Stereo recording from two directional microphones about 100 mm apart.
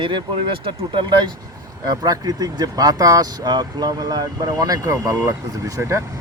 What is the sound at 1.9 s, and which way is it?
Speech, 40° right (ahead or behind).